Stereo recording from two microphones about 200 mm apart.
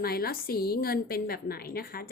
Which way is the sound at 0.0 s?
50° left (ahead or behind).